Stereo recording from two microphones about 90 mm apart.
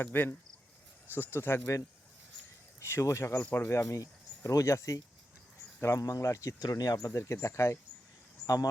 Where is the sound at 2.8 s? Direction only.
30° left (ahead or behind).